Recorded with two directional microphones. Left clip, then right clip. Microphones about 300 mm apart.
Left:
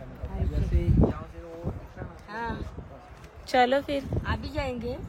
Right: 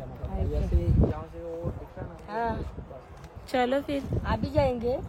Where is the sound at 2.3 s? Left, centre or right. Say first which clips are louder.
Right 4 dB; right.